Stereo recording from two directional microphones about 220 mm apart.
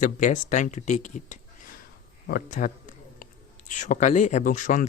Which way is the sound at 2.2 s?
40° left (ahead or behind).